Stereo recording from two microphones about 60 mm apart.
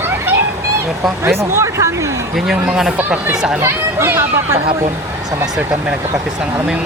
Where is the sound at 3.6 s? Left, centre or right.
Right.